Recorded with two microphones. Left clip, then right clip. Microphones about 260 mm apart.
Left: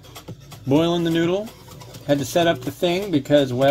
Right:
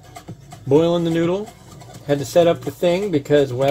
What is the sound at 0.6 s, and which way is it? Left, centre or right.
Speech, left.